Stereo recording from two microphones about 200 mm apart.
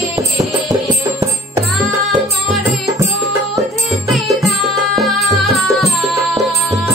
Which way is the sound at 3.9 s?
Centre (ahead or behind).